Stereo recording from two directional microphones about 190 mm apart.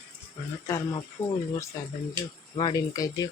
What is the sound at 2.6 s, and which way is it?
Speech, 20° left (ahead or behind).